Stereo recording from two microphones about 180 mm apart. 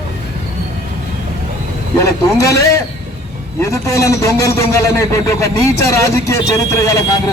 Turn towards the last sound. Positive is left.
turn(degrees=20)  # may be behind; listen again after turning